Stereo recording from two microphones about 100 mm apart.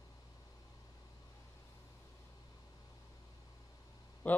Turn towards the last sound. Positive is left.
turn(degrees=15)  # may be behind; listen again after turning